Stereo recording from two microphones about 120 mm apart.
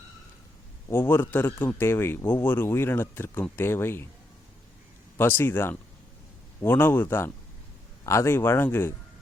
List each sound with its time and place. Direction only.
0.9 s a man's voice: 20° left (ahead or behind)
5.1 s a man's voice: 20° left (ahead or behind)